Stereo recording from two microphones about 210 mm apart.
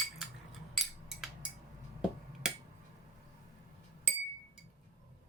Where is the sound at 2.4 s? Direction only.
5° right (ahead or behind).